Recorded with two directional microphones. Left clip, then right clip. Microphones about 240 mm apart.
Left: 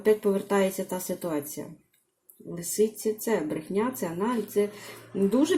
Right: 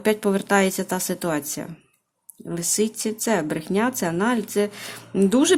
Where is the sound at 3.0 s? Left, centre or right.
Right.